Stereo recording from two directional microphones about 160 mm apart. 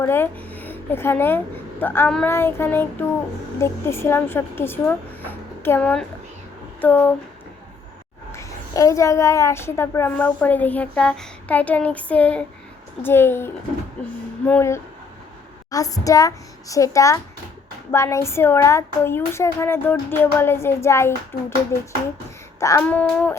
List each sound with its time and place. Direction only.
0.0 s a child's voice: 15° left (ahead or behind)
8.3 s a child's voice: 20° left (ahead or behind)